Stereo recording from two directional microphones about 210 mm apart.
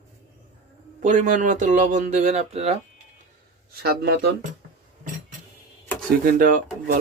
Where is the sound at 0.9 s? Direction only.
35° right (ahead or behind).